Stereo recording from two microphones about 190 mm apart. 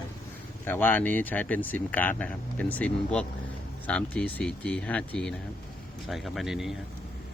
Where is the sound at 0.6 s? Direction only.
10° left (ahead or behind).